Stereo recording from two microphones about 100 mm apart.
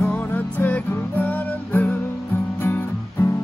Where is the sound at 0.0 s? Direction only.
20° left (ahead or behind).